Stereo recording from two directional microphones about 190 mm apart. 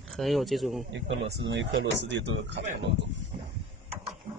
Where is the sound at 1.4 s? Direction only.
75° right (ahead or behind).